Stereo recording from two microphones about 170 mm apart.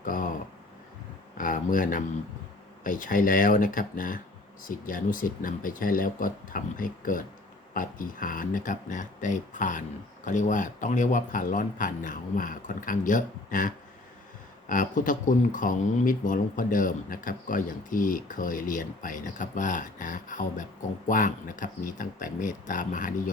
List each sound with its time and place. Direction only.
0.0 s speech: 55° left (ahead or behind)
1.4 s speech: 55° left (ahead or behind)